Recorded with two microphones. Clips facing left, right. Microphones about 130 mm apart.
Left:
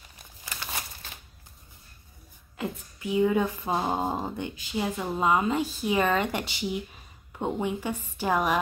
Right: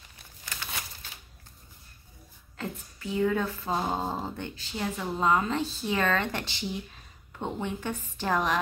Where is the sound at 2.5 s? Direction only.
15° left (ahead or behind).